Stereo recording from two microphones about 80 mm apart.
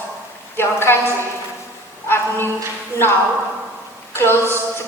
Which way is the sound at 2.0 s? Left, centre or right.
Left.